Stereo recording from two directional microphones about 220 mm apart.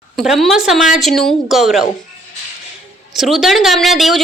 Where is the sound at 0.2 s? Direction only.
Centre (ahead or behind).